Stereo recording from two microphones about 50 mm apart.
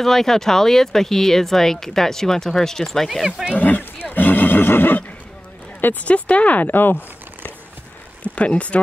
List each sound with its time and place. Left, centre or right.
0.0 s speech: centre
3.3 s speech: centre
3.5 s neigh: left
5.8 s speech: left
6.0 s speech: left
8.2 s speech: left